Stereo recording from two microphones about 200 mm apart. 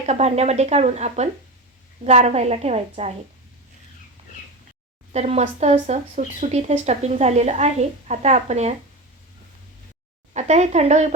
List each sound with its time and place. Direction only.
0.0 s speech: 35° right (ahead or behind)
5.1 s speech: 35° right (ahead or behind)
10.3 s speech: 35° right (ahead or behind)